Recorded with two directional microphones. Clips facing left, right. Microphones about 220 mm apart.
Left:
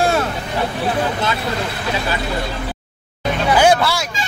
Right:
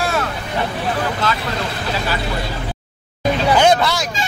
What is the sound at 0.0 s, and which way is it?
Vehicle, 30° left (ahead or behind).